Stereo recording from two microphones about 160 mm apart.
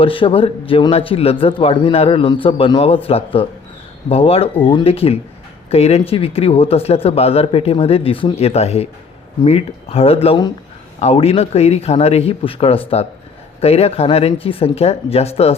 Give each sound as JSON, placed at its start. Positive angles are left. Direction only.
{"t": 0.0, "sound": "speech", "side_deg": 35}